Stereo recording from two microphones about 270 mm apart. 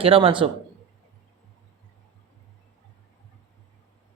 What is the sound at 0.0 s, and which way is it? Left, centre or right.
Speech, centre.